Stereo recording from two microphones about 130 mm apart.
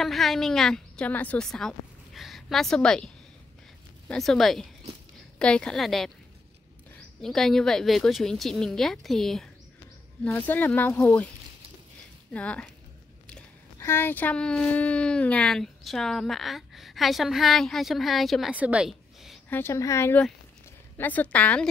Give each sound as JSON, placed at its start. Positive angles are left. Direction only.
{"t": 0.0, "sound": "a woman's voice", "side_deg": 0}
{"t": 4.1, "sound": "speech", "side_deg": 5}
{"t": 7.2, "sound": "speech", "side_deg": 5}
{"t": 10.2, "sound": "speech", "side_deg": 15}
{"t": 12.3, "sound": "speech", "side_deg": 10}
{"t": 13.7, "sound": "speech", "side_deg": 20}
{"t": 18.5, "sound": "a sound", "side_deg": -10}
{"t": 19.5, "sound": "a woman's voice", "side_deg": 20}